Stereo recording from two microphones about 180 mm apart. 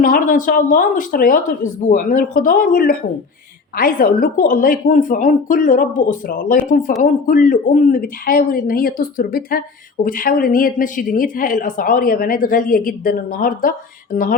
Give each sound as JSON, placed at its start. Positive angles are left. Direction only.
{"t": 0.0, "sound": "speech", "side_deg": 50}